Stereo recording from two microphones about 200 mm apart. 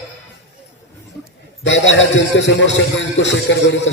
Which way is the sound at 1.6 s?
65° left (ahead or behind).